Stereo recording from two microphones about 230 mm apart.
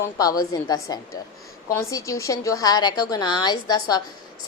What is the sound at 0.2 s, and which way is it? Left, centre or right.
A woman's voice, centre.